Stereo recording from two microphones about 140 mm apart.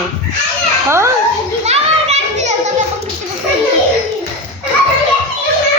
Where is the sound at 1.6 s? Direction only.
50° right (ahead or behind).